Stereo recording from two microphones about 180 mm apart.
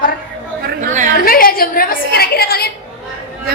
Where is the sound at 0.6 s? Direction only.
45° right (ahead or behind).